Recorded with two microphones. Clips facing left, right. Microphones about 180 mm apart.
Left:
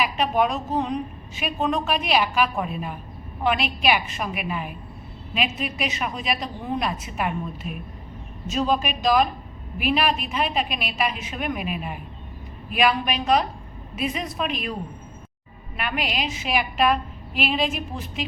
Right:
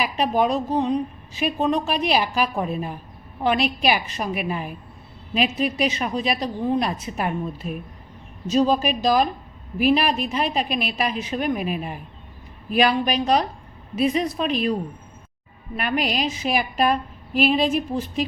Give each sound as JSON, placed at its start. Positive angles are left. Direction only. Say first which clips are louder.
{"t": 0.0, "sound": "a woman's voice", "louder": "right 1 dB", "side_deg": -35}
{"t": 15.8, "sound": "a woman's voice", "louder": "right 4 dB", "side_deg": -40}